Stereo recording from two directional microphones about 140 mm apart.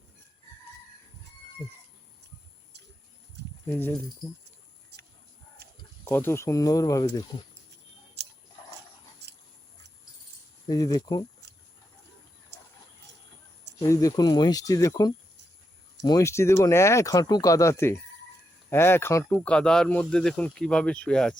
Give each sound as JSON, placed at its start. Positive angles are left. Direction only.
{"t": 3.7, "sound": "speech", "side_deg": 15}
{"t": 6.1, "sound": "speech", "side_deg": 15}
{"t": 10.7, "sound": "speech", "side_deg": 25}
{"t": 13.8, "sound": "speech", "side_deg": 25}
{"t": 19.5, "sound": "speech", "side_deg": 5}